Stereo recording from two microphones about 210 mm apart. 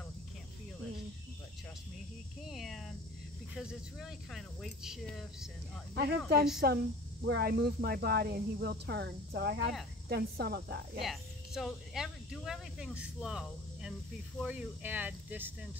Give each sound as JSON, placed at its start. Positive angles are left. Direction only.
{"t": 2.5, "sound": "speech", "side_deg": 0}
{"t": 5.9, "sound": "speech", "side_deg": -50}
{"t": 11.0, "sound": "speech", "side_deg": 0}